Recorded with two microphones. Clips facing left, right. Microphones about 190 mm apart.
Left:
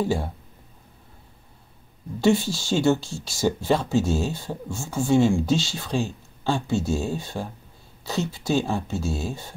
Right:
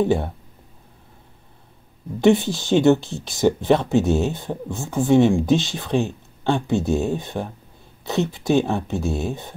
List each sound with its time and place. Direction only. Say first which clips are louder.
0.0 s speech: right 5 dB; 20° right (ahead or behind)
2.1 s speech: right 4 dB; 20° right (ahead or behind)